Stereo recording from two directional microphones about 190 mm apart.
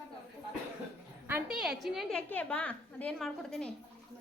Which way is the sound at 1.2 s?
5° right (ahead or behind).